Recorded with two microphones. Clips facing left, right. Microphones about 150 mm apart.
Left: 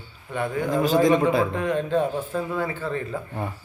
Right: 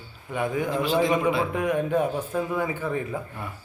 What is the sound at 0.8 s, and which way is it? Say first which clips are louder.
Speech: left 5 dB; 40° left (ahead or behind).